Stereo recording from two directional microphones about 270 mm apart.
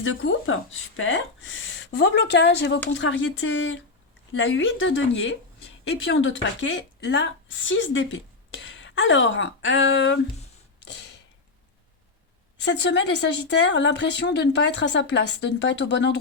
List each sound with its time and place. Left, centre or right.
0.0 s a woman's voice: left
12.5 s speech: left